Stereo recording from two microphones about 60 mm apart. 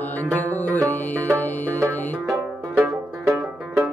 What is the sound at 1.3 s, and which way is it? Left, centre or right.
Music, right.